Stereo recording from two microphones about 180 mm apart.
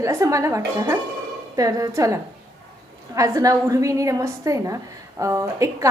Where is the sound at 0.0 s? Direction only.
15° right (ahead or behind).